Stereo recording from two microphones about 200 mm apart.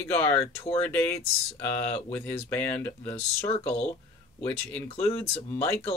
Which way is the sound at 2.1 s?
10° left (ahead or behind).